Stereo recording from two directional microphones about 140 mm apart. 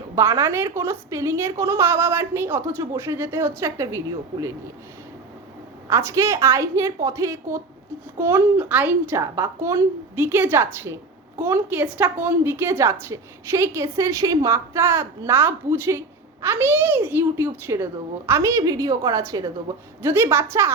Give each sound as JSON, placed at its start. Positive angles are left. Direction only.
{"t": 0.2, "sound": "a woman's voice", "side_deg": -20}
{"t": 5.9, "sound": "a woman's voice", "side_deg": -20}